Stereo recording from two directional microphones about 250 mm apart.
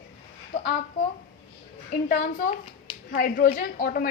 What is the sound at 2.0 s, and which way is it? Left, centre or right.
A woman's voice, left.